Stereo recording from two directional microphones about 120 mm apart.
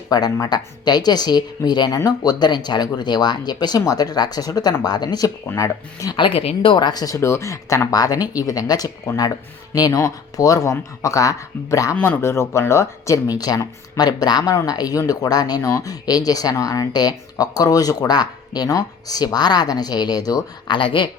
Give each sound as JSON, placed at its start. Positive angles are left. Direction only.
{"t": 0.1, "sound": "speech", "side_deg": 35}
{"t": 6.1, "sound": "speech", "side_deg": 45}